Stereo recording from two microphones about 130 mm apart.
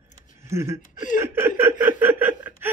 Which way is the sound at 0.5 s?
20° right (ahead or behind).